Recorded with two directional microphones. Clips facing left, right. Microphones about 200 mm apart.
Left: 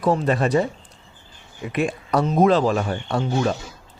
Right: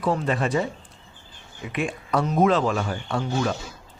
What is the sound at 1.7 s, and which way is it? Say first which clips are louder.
Speech: left 3 dB; 40° left (ahead or behind).